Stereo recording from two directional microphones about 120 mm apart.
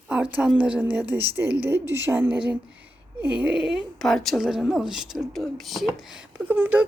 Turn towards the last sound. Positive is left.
turn(degrees=-15)  # may be behind; listen again after turning